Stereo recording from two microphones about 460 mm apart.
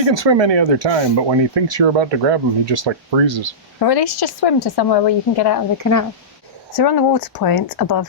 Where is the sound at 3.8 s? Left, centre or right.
Left.